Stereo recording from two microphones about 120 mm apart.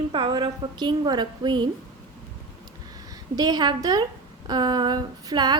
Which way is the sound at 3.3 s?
35° right (ahead or behind).